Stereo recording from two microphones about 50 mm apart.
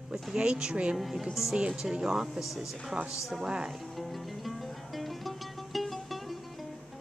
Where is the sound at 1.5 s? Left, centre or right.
Centre.